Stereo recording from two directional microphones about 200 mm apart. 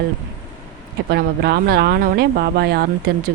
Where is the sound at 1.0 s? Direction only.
55° right (ahead or behind).